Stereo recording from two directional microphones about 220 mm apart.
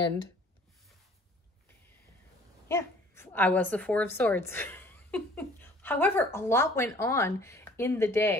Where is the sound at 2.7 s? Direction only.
10° left (ahead or behind).